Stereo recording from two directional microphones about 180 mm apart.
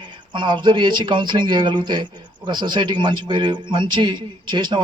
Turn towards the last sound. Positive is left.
turn(degrees=-25)  # may be behind; listen again after turning